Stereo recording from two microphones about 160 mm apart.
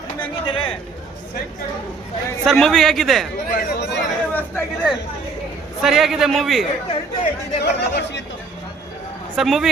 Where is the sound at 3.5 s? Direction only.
90° left.